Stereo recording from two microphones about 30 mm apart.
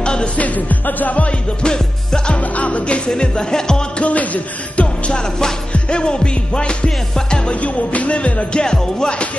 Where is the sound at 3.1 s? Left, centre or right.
Left.